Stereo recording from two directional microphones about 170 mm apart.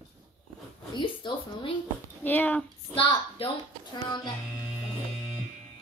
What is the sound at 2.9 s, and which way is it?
Speech, 30° left (ahead or behind).